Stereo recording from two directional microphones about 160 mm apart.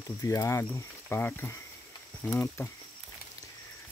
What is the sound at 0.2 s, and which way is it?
Speech, 20° left (ahead or behind).